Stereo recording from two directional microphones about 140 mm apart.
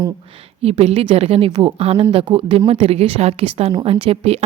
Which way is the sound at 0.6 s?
45° right (ahead or behind).